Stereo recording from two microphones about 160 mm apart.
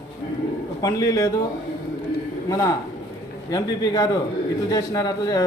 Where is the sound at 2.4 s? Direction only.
20° left (ahead or behind).